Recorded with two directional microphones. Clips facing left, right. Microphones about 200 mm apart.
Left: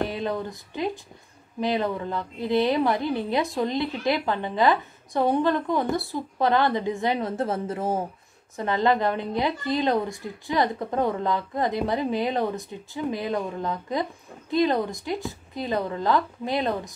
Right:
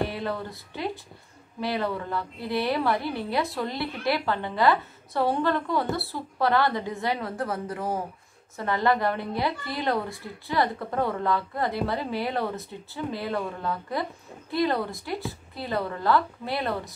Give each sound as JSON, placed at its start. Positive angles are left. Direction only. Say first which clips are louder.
{"t": 0.0, "sound": "a woman's voice", "louder": "left 2 dB", "side_deg": 20}